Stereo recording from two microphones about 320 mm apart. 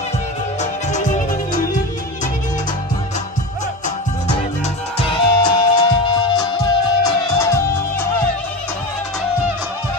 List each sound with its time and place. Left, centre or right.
0.6 s music: left
4.9 s music: centre